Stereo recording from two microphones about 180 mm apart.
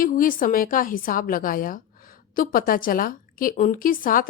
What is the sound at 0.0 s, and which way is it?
Speech, 50° left (ahead or behind).